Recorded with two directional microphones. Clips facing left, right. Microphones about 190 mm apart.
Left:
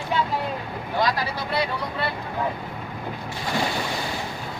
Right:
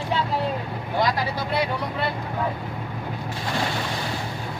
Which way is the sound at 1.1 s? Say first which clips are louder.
Right 1 dB; 20° right (ahead or behind).